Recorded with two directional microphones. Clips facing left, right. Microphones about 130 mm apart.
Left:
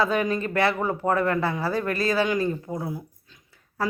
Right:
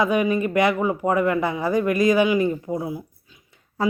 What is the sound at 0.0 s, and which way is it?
Speech, 15° right (ahead or behind).